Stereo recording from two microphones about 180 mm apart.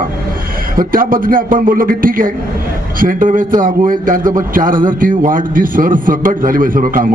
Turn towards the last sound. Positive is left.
turn(degrees=-50)  # may be behind; listen again after turning